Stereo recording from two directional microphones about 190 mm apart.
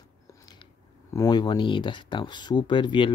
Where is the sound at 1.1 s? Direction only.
20° left (ahead or behind).